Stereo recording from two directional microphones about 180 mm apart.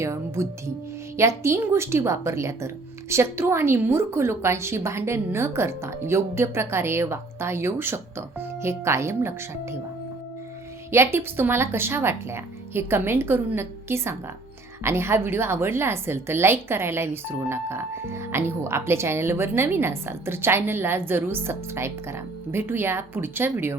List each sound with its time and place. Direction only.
0.0 s a woman's voice: 15° right (ahead or behind)
10.9 s a woman's voice: 15° right (ahead or behind)